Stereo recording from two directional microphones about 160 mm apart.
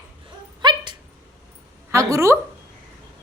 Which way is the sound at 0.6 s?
30° right (ahead or behind).